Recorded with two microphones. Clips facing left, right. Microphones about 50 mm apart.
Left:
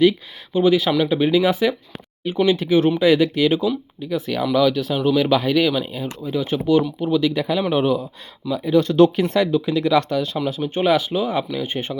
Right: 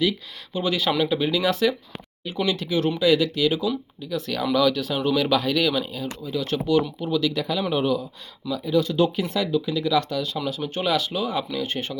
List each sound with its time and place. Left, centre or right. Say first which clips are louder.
0.5 s speech: left 9 dB; centre
0.8 s speech: left 3 dB; centre
1.1 s speech: left 5 dB; centre; by 3.7 s left
4.0 s speech: left 5 dB; left
4.5 s speech: left 3 dB; centre; by 10.3 s left
10.3 s speech: left 5 dB; left